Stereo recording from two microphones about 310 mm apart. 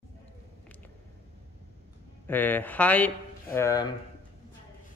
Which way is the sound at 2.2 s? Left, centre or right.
Centre.